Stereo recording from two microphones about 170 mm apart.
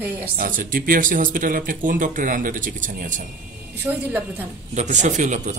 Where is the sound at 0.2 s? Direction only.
55° right (ahead or behind).